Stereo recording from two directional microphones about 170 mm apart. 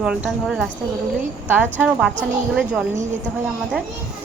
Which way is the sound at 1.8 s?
5° right (ahead or behind).